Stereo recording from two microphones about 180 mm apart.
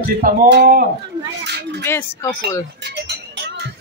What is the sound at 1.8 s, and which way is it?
Speech, 15° left (ahead or behind).